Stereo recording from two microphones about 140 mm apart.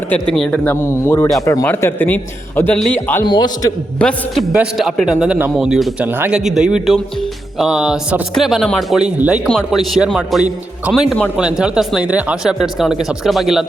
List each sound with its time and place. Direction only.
0.1 s a man's voice: 5° left (ahead or behind)
3.2 s a man's voice: 30° left (ahead or behind)
3.9 s a man's voice: 5° left (ahead or behind)
4.5 s speech: 5° right (ahead or behind)
6.4 s speech: 5° right (ahead or behind)